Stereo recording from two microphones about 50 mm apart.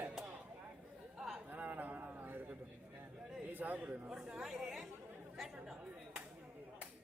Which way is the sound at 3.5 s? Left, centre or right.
Right.